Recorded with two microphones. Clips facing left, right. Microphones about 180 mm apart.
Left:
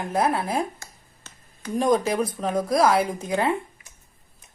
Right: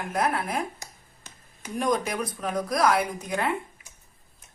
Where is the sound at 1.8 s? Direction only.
30° left (ahead or behind).